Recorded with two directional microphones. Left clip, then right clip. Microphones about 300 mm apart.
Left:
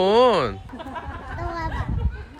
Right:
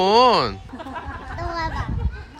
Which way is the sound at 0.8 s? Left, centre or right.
Right.